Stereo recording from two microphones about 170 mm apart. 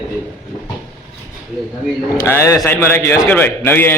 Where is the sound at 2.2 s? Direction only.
15° left (ahead or behind).